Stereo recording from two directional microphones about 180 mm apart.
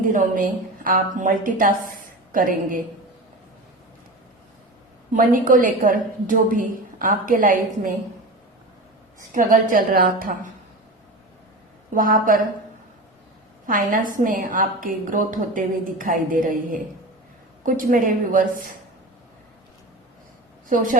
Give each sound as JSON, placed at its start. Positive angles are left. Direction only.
{"t": 0.1, "sound": "a woman's voice", "side_deg": -45}
{"t": 5.1, "sound": "a woman's voice", "side_deg": -45}
{"t": 9.3, "sound": "a woman's voice", "side_deg": -50}
{"t": 11.9, "sound": "a woman's voice", "side_deg": -50}
{"t": 13.7, "sound": "a woman's voice", "side_deg": -50}
{"t": 20.7, "sound": "a woman's voice", "side_deg": -45}